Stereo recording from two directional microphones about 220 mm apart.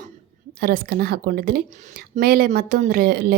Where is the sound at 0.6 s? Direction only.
45° right (ahead or behind).